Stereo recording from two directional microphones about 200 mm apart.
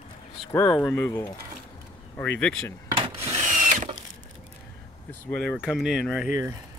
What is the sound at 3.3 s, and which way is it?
Wood, 40° right (ahead or behind).